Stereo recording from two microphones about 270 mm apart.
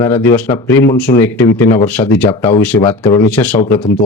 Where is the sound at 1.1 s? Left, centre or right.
Left.